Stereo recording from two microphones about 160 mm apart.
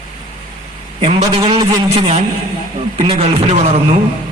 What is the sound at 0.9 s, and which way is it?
A man's voice, 35° right (ahead or behind).